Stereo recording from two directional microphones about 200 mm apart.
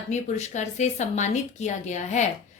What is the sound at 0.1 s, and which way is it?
A woman's voice, 35° left (ahead or behind).